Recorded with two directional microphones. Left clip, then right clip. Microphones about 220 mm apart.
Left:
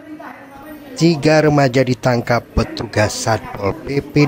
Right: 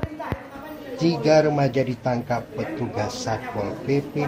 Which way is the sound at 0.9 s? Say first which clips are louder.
Left 4 dB; 45° left (ahead or behind).